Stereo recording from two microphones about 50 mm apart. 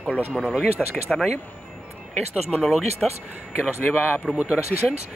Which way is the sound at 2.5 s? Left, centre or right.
Centre.